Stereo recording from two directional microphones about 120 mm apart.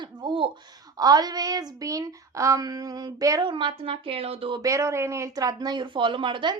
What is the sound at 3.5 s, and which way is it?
A woman's voice, 45° right (ahead or behind).